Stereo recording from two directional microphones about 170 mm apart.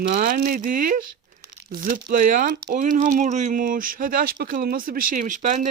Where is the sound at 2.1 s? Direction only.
55° right (ahead or behind).